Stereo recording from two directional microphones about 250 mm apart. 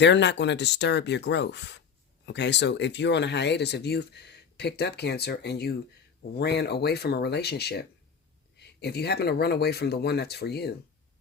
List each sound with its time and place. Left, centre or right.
0.0 s speech: left